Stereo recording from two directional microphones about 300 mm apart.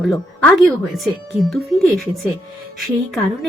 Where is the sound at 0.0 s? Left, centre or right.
Centre.